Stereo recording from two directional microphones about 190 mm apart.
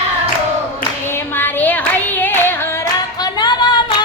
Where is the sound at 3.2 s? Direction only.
20° left (ahead or behind).